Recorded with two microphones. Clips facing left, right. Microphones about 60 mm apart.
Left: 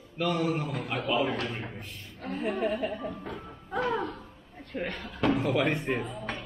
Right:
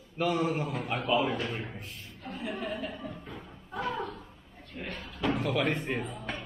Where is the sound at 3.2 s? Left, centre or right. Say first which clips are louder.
Left 5 dB; left.